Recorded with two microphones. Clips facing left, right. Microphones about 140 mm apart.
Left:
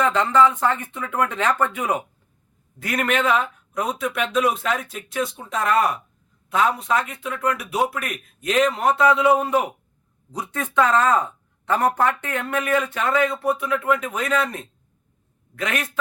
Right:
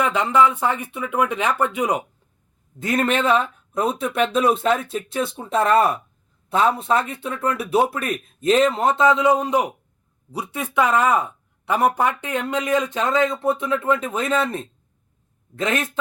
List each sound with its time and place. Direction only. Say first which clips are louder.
0.0 s speech: even; 10° right (ahead or behind)
2.7 s speech: right 2 dB; 25° right (ahead or behind)